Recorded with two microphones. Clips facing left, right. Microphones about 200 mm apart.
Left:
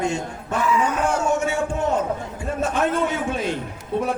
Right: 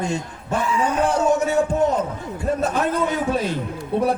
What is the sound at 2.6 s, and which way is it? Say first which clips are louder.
Speech: left 3 dB; 35° right (ahead or behind).